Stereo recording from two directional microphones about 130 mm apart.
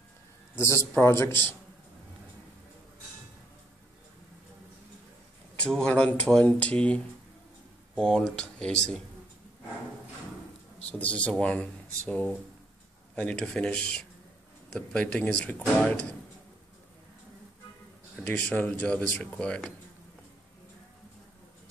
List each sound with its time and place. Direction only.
0.6 s a man's voice: 20° left (ahead or behind)
5.6 s speech: 5° left (ahead or behind)
10.9 s speech: 10° left (ahead or behind)
18.2 s speech: 10° left (ahead or behind)